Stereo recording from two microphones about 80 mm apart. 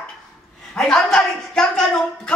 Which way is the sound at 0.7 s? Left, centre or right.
Centre.